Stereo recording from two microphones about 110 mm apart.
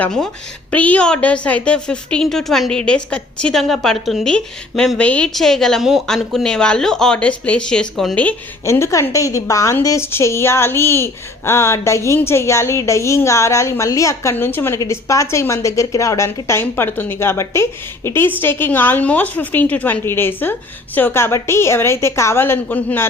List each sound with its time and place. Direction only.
0.0 s a woman's voice: 5° left (ahead or behind)
8.6 s speech: 25° left (ahead or behind)